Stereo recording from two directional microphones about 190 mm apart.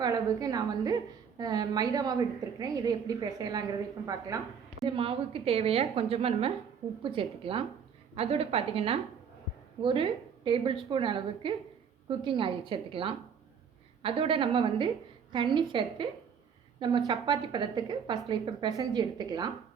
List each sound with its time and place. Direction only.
0.0 s a woman's voice: 20° right (ahead or behind)
4.9 s a woman's voice: 30° right (ahead or behind)